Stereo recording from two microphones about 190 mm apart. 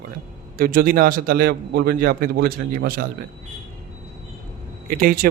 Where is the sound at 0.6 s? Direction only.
50° right (ahead or behind).